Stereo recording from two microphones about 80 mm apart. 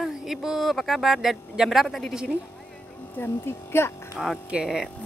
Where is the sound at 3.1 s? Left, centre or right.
Left.